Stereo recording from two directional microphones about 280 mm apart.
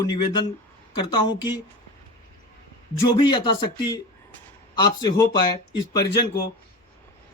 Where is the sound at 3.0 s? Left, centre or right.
Centre.